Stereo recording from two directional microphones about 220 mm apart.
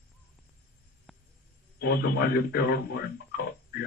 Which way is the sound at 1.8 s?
45° left (ahead or behind).